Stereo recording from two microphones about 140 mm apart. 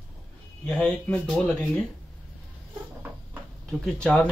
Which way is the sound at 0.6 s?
10° left (ahead or behind).